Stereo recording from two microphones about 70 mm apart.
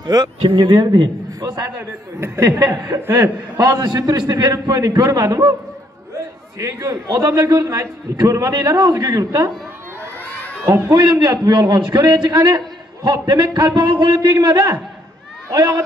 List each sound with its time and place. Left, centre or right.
0.0 s speech: right
1.4 s a man's voice: right
1.8 s a man's voice: right
2.6 s a man's voice: right
3.0 s a man's voice: right
3.6 s a man's voice: right
6.6 s a man's voice: right
11.0 s a man's voice: right
15.5 s a man's voice: right